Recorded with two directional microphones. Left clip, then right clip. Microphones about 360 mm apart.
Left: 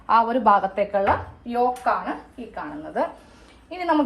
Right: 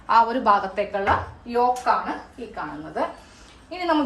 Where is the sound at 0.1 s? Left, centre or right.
Centre.